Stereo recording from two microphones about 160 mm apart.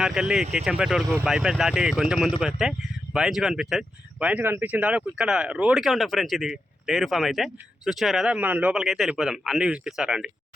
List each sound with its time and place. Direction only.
0.0 s speech: 5° right (ahead or behind)